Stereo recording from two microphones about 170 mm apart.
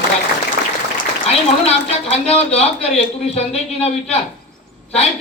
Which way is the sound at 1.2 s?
40° left (ahead or behind).